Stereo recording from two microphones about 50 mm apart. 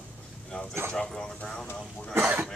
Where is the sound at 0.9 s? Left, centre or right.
Centre.